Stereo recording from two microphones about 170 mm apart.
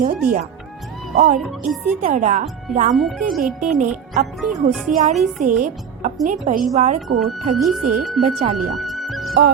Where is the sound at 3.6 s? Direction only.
45° right (ahead or behind).